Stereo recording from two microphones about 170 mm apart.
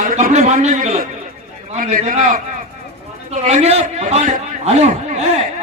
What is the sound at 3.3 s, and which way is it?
A man's voice, 40° right (ahead or behind).